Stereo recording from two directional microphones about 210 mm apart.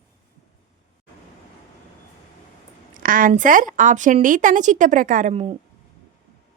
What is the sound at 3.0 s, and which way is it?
A woman's voice, 40° right (ahead or behind).